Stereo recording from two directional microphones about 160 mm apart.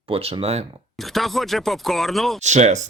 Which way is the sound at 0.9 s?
Centre (ahead or behind).